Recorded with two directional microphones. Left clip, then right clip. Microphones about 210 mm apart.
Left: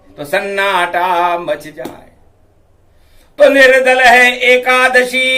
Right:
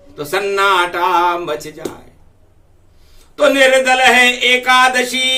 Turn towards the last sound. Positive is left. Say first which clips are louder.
# left 4 dB
turn(degrees=0)  # may be behind; listen again after turning